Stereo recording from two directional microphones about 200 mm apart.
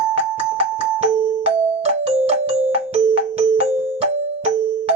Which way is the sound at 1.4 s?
30° right (ahead or behind).